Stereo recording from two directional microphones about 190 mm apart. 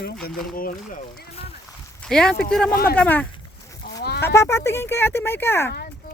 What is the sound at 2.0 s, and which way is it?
A woman's voice, 5° left (ahead or behind).